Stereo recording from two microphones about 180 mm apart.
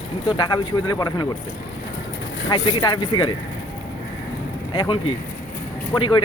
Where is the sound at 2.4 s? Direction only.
30° left (ahead or behind).